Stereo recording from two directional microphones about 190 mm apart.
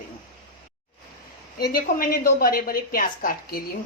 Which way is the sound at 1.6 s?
50° left (ahead or behind).